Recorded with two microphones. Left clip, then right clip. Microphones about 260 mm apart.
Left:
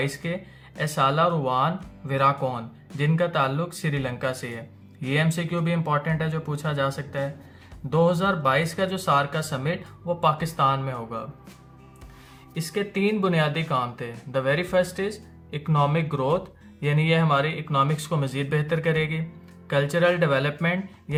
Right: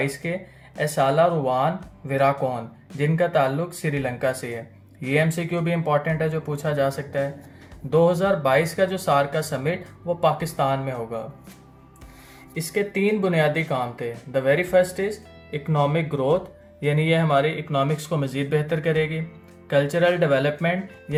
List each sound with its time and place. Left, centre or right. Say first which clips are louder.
0.0 s speech: right 3 dB; centre
12.5 s speech: right 3 dB; centre